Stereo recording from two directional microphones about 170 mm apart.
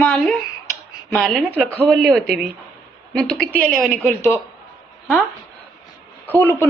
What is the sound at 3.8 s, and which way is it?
Speech, 10° left (ahead or behind).